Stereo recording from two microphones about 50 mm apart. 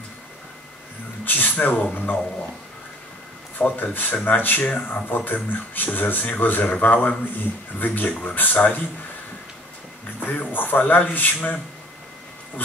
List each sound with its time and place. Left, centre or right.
1.2 s speech: left
3.5 s speech: left
10.2 s speech: left